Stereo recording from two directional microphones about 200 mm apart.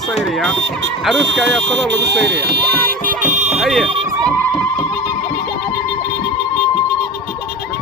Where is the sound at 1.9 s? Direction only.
60° right (ahead or behind).